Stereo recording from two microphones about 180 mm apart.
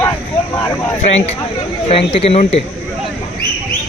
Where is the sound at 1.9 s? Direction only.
30° left (ahead or behind).